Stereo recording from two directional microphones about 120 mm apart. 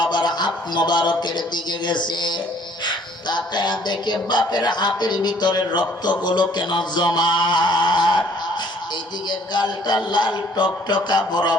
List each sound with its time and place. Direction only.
0.0 s a man's voice: 35° left (ahead or behind)
9.3 s speech: 35° left (ahead or behind)